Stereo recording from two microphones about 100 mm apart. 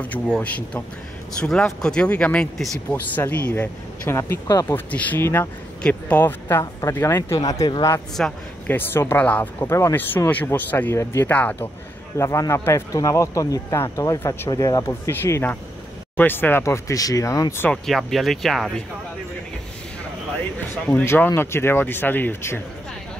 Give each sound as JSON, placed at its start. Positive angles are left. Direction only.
{"t": 0.0, "sound": "speech", "side_deg": 15}
{"t": 4.1, "sound": "speech", "side_deg": 30}
{"t": 4.6, "sound": "speech", "side_deg": 20}
{"t": 5.8, "sound": "speech", "side_deg": 10}
{"t": 7.3, "sound": "speech", "side_deg": 40}
{"t": 8.2, "sound": "speech", "side_deg": 10}
{"t": 8.6, "sound": "speech", "side_deg": 20}
{"t": 12.2, "sound": "speech", "side_deg": 30}
{"t": 14.8, "sound": "speech", "side_deg": 25}
{"t": 17.6, "sound": "speech", "side_deg": 0}
{"t": 20.9, "sound": "speech", "side_deg": 20}